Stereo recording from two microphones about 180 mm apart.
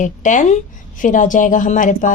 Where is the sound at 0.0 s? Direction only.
45° left (ahead or behind).